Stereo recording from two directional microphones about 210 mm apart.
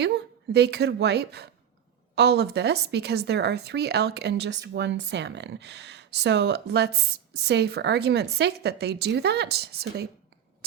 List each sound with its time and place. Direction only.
0.0 s speech: 50° right (ahead or behind)